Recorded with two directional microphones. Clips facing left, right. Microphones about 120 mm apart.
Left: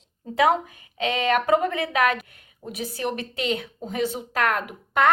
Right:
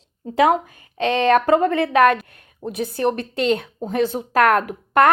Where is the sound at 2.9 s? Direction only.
55° right (ahead or behind).